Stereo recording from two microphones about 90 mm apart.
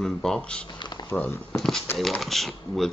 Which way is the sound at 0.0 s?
5° left (ahead or behind).